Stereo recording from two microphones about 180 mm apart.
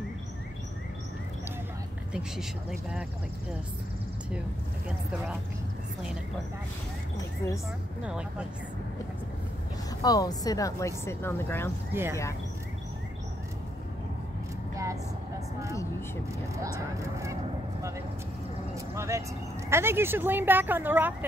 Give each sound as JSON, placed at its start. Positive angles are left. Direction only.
{"t": 4.8, "sound": "speech", "side_deg": -5}
{"t": 8.0, "sound": "speech", "side_deg": -5}
{"t": 10.0, "sound": "speech", "side_deg": 20}
{"t": 11.9, "sound": "a woman's voice", "side_deg": -15}
{"t": 18.9, "sound": "a woman's voice", "side_deg": -15}